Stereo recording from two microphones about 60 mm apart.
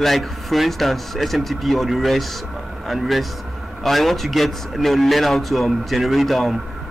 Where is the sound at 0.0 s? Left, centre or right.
Centre.